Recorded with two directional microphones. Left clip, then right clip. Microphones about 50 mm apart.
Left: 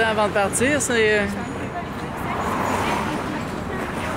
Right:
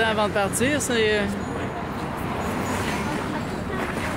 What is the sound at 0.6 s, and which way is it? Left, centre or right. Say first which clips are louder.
Speech: left 3 dB; left.